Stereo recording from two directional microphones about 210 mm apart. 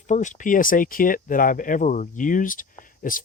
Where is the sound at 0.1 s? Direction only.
35° left (ahead or behind).